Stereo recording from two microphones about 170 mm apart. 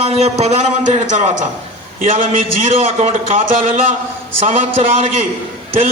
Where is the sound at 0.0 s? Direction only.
40° right (ahead or behind).